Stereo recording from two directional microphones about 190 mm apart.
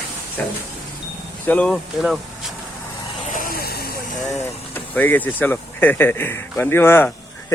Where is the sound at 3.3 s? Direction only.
45° left (ahead or behind).